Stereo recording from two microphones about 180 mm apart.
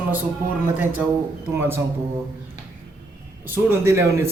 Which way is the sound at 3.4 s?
10° right (ahead or behind).